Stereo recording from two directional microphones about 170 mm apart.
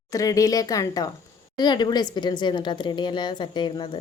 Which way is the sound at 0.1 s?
20° left (ahead or behind).